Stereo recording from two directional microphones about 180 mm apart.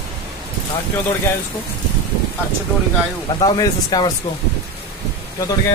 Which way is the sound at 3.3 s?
20° left (ahead or behind).